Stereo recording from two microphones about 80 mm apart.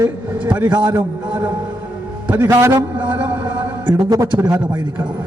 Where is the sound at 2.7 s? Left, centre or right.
Right.